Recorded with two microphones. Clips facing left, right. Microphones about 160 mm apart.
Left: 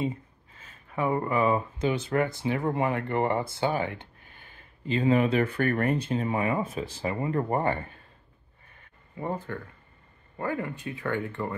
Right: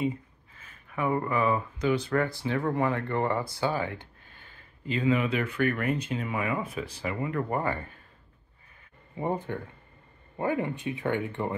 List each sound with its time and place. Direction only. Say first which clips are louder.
0.6 s speech: left 2 dB; 25° left (ahead or behind)
5.1 s speech: left 4 dB; 40° left (ahead or behind)
9.1 s speech: right 2 dB; 20° right (ahead or behind)